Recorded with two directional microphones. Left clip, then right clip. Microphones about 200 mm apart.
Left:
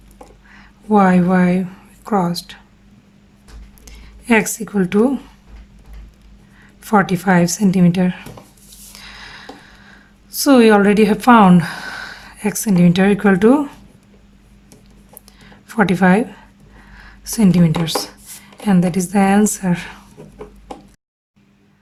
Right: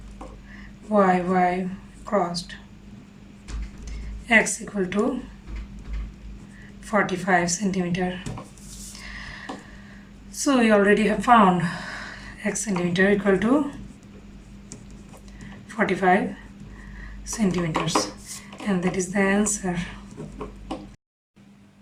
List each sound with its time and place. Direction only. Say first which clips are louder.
0.9 s a woman's voice: left 5 dB; 60° left (ahead or behind)
3.8 s speech: left 5 dB; 60° left (ahead or behind)
6.8 s a woman's voice: left 8 dB; 60° left (ahead or behind)
9.0 s a sound: left 3 dB; 60° left (ahead or behind)
10.3 s speech: left 8 dB; 60° left (ahead or behind)
15.7 s a woman's voice: left 5 dB; 60° left (ahead or behind)
17.2 s a woman's voice: left 9 dB; 60° left (ahead or behind)